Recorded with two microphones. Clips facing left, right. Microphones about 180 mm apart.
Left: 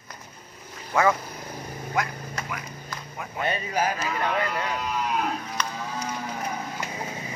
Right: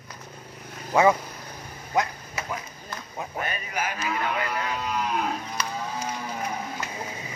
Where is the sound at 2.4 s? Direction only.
5° right (ahead or behind).